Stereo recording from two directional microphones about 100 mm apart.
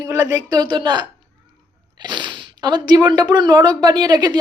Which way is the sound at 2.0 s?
50° right (ahead or behind).